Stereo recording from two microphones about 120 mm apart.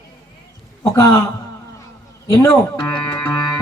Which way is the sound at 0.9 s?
30° left (ahead or behind).